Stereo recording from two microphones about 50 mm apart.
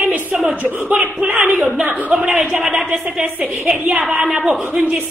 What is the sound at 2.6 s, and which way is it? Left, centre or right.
A woman's voice, centre.